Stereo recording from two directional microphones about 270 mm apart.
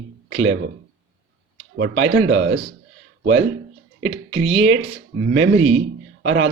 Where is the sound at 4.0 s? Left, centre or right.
Right.